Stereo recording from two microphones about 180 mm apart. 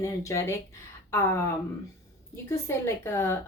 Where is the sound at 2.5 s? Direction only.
15° left (ahead or behind).